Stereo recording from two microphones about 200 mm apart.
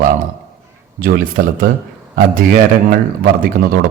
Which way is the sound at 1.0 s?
45° right (ahead or behind).